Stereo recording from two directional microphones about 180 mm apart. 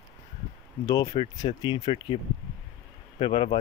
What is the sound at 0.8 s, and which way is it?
Speech, 20° left (ahead or behind).